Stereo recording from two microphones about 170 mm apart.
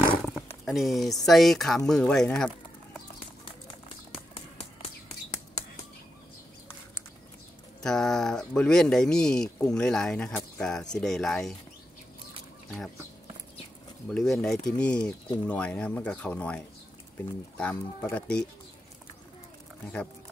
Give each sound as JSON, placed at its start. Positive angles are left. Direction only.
{"t": 0.1, "sound": "a sound", "side_deg": 0}
{"t": 1.2, "sound": "speech", "side_deg": 0}
{"t": 4.1, "sound": "bird", "side_deg": 35}
{"t": 7.8, "sound": "speech", "side_deg": 5}
{"t": 14.0, "sound": "speech", "side_deg": 5}